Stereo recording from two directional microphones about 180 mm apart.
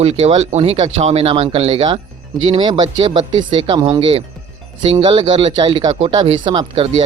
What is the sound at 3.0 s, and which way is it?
Speech, 35° right (ahead or behind).